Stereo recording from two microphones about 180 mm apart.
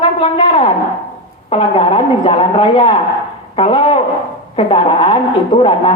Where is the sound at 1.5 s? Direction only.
30° left (ahead or behind).